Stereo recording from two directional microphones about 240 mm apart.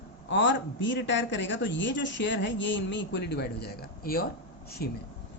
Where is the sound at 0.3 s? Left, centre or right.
Left.